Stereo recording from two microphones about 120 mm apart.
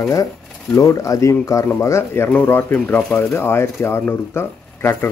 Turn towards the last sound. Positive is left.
turn(degrees=20)  # may be behind; listen again after turning